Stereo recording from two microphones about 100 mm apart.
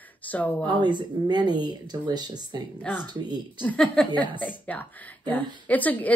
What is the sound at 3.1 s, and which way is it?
Speech, 45° right (ahead or behind).